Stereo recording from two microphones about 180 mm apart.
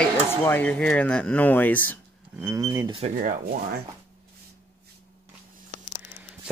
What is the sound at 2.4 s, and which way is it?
Speech, 15° right (ahead or behind).